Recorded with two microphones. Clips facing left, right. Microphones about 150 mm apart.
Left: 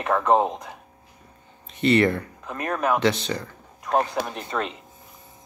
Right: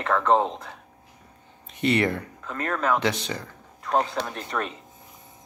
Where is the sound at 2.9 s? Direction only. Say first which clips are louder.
Left 3 dB; 15° right (ahead or behind).